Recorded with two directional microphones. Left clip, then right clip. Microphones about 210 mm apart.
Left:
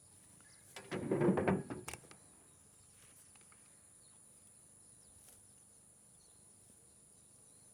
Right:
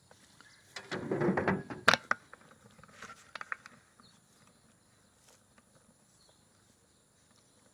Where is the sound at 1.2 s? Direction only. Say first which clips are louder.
Right 3 dB; 20° right (ahead or behind).